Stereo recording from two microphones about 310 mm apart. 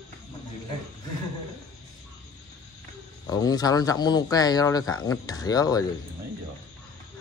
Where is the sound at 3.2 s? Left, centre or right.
Centre.